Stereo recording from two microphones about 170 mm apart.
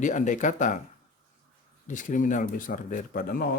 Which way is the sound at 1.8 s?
50° left (ahead or behind).